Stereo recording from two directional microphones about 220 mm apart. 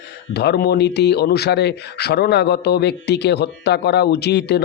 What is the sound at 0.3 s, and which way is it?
Speech, 45° left (ahead or behind).